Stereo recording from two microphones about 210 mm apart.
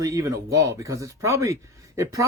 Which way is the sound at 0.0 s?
15° right (ahead or behind).